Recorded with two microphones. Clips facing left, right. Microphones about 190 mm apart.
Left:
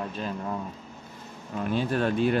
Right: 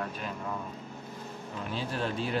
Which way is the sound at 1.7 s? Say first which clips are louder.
Left 8 dB; 55° left (ahead or behind).